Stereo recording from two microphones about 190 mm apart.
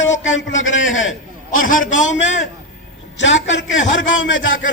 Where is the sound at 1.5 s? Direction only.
45° left (ahead or behind).